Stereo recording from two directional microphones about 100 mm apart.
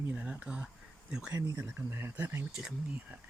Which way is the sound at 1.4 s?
30° right (ahead or behind).